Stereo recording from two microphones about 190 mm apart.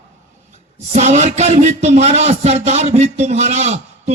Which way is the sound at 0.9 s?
40° right (ahead or behind).